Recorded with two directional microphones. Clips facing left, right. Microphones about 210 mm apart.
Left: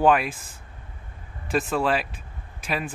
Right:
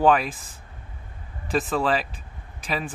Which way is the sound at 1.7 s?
10° left (ahead or behind).